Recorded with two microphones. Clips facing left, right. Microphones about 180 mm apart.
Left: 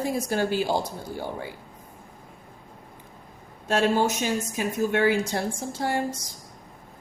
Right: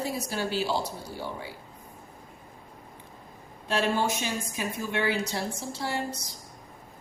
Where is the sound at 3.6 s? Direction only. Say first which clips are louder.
Left 4 dB; 45° left (ahead or behind).